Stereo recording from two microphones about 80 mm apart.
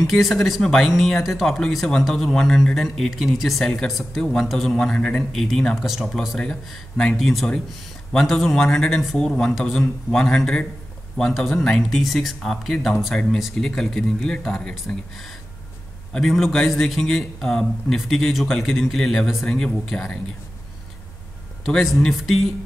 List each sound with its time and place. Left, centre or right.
0.0 s speech: centre
4.2 s speech: centre
16.1 s speech: centre
21.6 s speech: centre